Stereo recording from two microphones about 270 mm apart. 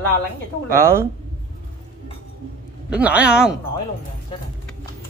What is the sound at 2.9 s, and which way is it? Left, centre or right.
Speech, centre.